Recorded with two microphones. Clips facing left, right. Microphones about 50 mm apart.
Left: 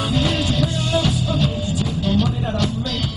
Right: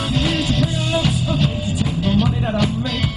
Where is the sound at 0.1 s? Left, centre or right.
Centre.